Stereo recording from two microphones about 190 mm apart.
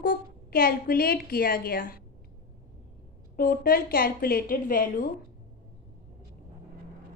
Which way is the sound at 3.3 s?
50° left (ahead or behind).